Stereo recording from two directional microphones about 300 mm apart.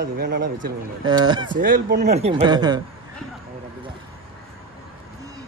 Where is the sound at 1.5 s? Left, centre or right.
Right.